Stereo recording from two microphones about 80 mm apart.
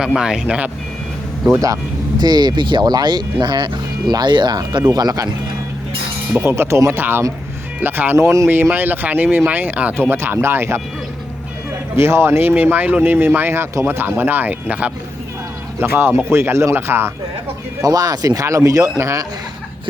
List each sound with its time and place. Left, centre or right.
0.0 s speech: centre
2.1 s speech: right
4.9 s speech: right
6.4 s speech: right
11.9 s speech: right; by 14.9 s centre
15.8 s speech: right
17.8 s speech: right